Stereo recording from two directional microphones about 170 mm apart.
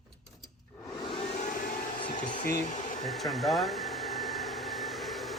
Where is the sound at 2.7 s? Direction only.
45° left (ahead or behind).